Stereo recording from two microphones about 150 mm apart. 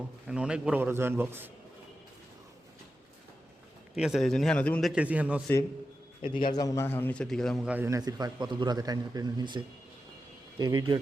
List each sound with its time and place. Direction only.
0.3 s a man's voice: 5° right (ahead or behind)
3.9 s a man's voice: 5° right (ahead or behind)
4.9 s a man's voice: 10° right (ahead or behind)
6.2 s a man's voice: 30° left (ahead or behind); by 7.7 s 5° left (ahead or behind)
7.7 s a man's voice: 15° right (ahead or behind)